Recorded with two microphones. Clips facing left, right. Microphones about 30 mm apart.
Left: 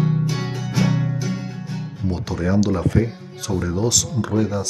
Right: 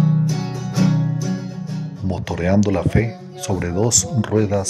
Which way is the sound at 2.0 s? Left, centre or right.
Right.